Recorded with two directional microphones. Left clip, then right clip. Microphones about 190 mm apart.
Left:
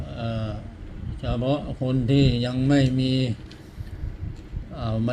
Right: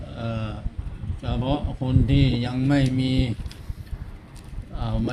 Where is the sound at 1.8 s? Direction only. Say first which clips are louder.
Left 3 dB; centre (ahead or behind).